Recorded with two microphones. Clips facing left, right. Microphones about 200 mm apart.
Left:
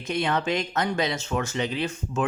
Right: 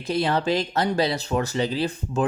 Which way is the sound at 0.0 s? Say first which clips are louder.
Right 3 dB; 35° right (ahead or behind).